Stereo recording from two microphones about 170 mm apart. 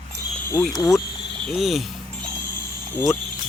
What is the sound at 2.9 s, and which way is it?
Speech, 15° left (ahead or behind).